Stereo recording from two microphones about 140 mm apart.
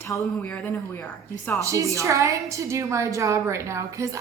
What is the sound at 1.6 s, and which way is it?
A woman's voice, 25° right (ahead or behind).